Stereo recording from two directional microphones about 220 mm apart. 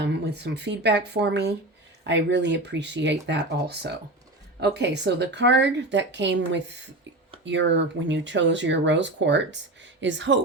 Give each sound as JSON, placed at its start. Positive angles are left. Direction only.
{"t": 0.0, "sound": "speech", "side_deg": -50}